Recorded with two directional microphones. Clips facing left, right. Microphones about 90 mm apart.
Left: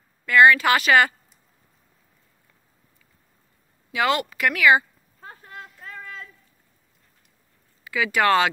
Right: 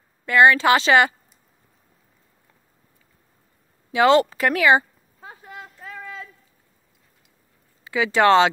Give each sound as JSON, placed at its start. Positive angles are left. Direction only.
{"t": 0.2, "sound": "speech", "side_deg": -25}
{"t": 3.9, "sound": "speech", "side_deg": -30}
{"t": 5.2, "sound": "clip-clop", "side_deg": -10}
{"t": 5.8, "sound": "a sound", "side_deg": -5}
{"t": 7.8, "sound": "speech", "side_deg": -25}